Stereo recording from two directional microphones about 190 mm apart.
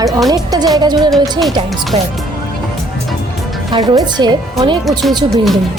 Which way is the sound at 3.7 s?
20° right (ahead or behind).